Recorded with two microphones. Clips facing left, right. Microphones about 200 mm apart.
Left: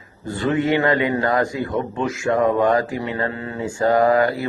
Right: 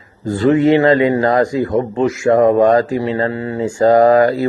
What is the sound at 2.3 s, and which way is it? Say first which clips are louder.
Mantra: right 7 dB; 40° right (ahead or behind).